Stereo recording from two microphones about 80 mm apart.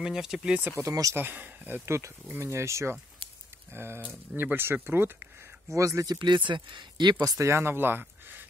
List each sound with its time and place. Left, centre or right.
0.0 s speech: centre
0.7 s speech: right
1.1 s speech: right
1.9 s speech: right
5.8 s speech: right
6.0 s speech: right
7.3 s speech: right